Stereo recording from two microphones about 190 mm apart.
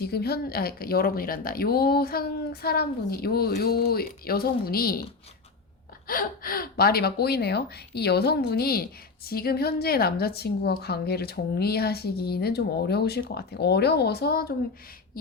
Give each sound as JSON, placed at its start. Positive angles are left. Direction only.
{"t": 0.0, "sound": "a woman's voice", "side_deg": 55}
{"t": 6.1, "sound": "a woman's voice", "side_deg": 50}